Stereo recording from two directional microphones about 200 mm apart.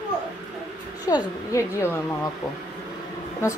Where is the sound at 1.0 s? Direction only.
15° left (ahead or behind).